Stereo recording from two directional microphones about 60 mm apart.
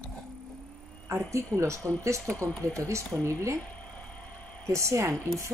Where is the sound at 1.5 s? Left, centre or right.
Right.